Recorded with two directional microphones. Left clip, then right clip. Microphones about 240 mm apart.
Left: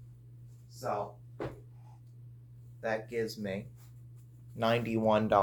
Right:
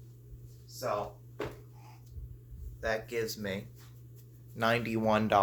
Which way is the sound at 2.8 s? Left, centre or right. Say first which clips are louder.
Right 1 dB; right.